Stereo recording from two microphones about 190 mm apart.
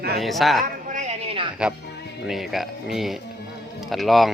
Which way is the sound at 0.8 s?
40° right (ahead or behind).